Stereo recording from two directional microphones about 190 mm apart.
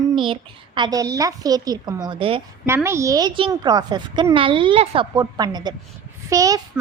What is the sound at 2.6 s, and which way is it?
A woman's voice, 15° right (ahead or behind).